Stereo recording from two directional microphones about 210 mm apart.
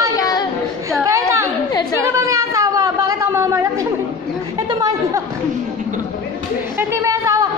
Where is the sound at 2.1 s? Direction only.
15° right (ahead or behind).